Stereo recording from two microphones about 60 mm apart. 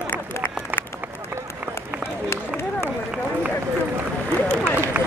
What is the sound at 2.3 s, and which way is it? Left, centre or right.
Run, left.